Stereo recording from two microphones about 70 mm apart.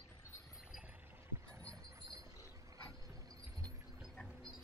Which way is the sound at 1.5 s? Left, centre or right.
Right.